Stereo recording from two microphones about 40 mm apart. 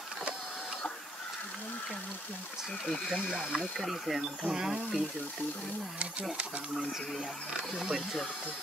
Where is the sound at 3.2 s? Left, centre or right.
Centre.